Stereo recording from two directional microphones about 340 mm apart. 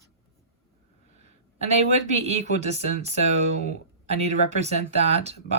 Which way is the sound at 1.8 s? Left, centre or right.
Centre.